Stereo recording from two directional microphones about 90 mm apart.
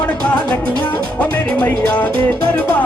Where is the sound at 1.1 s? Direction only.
15° left (ahead or behind).